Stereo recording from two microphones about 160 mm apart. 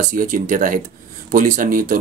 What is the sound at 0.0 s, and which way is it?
Speech, 55° right (ahead or behind).